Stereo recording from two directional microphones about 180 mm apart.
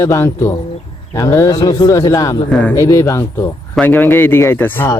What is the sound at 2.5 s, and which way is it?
Speech, 10° left (ahead or behind).